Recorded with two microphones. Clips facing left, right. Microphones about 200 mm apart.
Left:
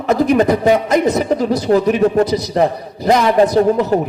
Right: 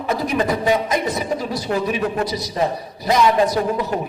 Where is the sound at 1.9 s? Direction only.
40° left (ahead or behind).